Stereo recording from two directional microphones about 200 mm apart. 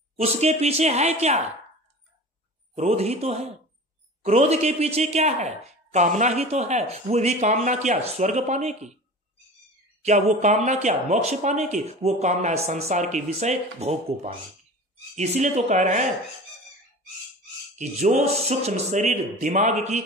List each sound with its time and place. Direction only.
0.1 s speech: 30° right (ahead or behind)
2.7 s speech: 35° right (ahead or behind)
10.0 s speech: 35° right (ahead or behind)
17.7 s speech: 35° right (ahead or behind)